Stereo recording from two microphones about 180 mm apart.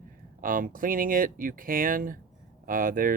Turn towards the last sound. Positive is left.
turn(degrees=-50)  # may be behind; listen again after turning